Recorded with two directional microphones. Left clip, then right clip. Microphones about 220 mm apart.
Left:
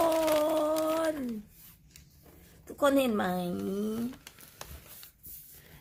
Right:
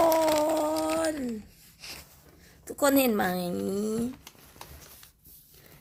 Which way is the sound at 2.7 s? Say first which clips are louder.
Right 2 dB; 20° right (ahead or behind).